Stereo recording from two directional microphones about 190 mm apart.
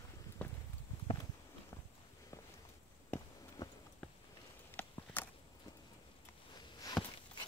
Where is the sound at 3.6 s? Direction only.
15° left (ahead or behind).